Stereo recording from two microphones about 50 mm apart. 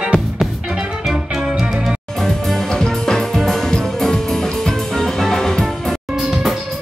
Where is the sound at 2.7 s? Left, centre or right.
Centre.